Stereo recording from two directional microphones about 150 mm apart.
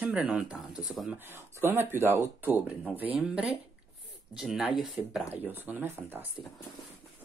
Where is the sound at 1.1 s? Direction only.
15° right (ahead or behind).